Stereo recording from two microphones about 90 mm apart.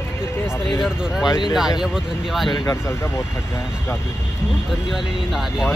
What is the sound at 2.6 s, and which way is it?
Speech, 30° left (ahead or behind).